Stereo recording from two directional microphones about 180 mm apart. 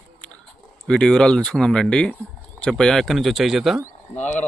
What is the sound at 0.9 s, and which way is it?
A man's voice, 5° left (ahead or behind).